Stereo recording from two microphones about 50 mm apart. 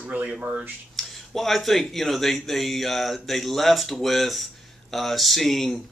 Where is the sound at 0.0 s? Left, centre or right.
Right.